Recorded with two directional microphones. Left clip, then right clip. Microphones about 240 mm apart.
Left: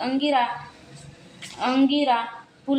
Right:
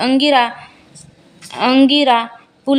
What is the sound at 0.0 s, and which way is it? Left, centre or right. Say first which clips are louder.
Speech: right 9 dB; right.